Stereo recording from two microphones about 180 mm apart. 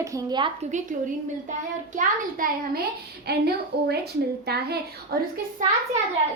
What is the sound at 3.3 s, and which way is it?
A woman's voice, 65° right (ahead or behind).